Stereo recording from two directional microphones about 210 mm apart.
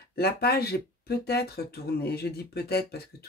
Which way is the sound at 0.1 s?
50° left (ahead or behind).